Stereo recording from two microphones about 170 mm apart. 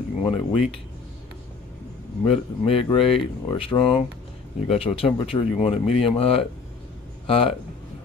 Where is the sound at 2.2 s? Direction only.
35° left (ahead or behind).